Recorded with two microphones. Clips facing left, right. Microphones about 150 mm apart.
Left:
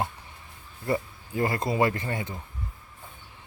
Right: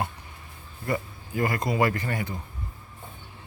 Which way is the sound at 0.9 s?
25° left (ahead or behind).